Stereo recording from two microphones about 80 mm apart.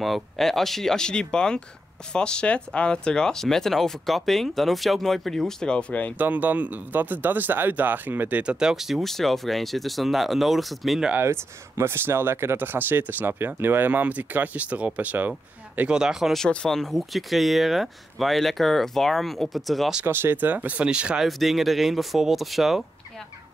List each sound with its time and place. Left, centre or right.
0.0 s speech: centre
6.1 s speech: right; by 11.1 s centre
11.1 s speech: right
15.9 s speech: centre
20.1 s speech: right; by 21.3 s centre
21.3 s speech: centre